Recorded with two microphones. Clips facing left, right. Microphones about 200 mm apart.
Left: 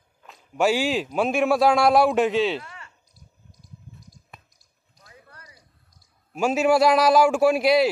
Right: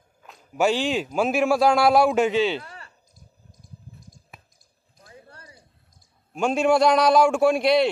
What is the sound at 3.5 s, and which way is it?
Cricket, 50° right (ahead or behind).